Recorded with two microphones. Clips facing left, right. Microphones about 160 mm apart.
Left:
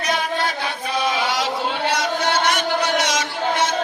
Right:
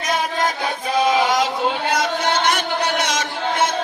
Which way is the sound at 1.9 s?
50° right (ahead or behind).